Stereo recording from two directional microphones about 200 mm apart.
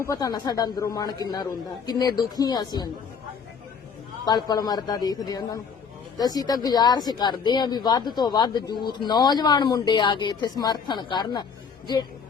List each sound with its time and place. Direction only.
0.0 s a woman's voice: 15° left (ahead or behind)
4.3 s a woman's voice: 20° left (ahead or behind)